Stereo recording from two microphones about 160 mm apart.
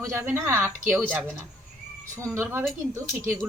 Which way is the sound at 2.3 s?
15° right (ahead or behind).